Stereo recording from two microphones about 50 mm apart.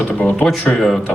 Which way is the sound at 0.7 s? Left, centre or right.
Centre.